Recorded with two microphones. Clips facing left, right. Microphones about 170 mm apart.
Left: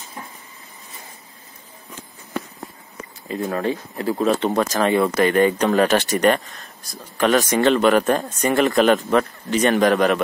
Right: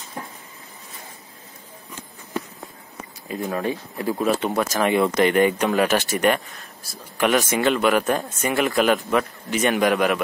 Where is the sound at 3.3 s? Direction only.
15° right (ahead or behind).